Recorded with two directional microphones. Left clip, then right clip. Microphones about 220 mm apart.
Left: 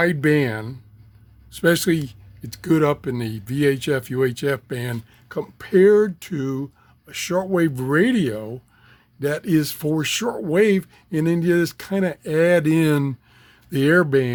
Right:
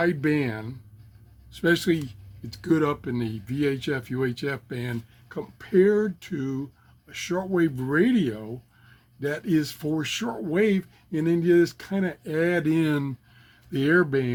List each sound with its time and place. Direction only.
0.0 s speech: 50° left (ahead or behind)